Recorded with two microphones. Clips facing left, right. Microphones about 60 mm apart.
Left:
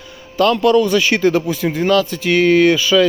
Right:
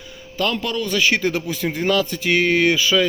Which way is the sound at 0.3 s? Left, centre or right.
Centre.